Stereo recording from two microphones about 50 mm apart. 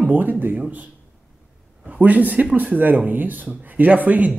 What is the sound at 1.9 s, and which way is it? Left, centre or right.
Speech, right.